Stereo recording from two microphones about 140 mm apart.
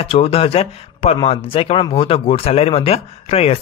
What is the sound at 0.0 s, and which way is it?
Speech, 45° left (ahead or behind).